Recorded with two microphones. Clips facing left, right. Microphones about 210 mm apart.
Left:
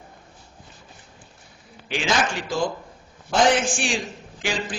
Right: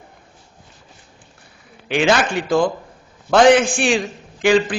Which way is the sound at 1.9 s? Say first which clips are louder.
Right 7 dB; 65° right (ahead or behind).